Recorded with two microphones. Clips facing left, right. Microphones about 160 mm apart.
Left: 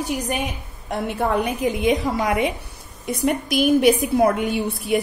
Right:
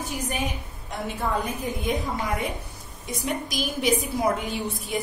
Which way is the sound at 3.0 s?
60° left (ahead or behind).